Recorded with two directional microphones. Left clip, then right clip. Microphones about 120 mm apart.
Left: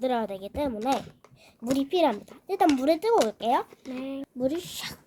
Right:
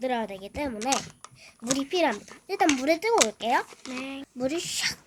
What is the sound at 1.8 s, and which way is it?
A woman's voice, 30° left (ahead or behind).